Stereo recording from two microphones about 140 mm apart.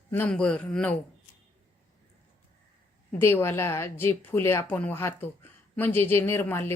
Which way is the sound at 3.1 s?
15° left (ahead or behind).